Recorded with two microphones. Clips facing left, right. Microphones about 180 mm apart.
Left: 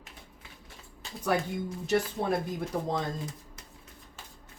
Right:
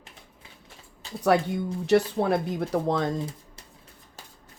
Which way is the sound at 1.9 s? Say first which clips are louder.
Right 6 dB; 70° right (ahead or behind).